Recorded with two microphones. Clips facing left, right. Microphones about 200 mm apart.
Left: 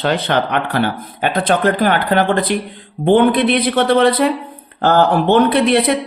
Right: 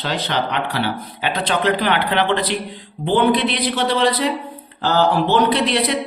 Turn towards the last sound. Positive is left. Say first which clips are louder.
# left 5 dB
turn(degrees=55)  # may be behind; listen again after turning